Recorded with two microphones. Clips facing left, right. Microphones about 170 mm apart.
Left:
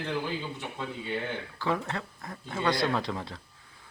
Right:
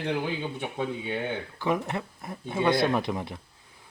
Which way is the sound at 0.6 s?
60° right (ahead or behind).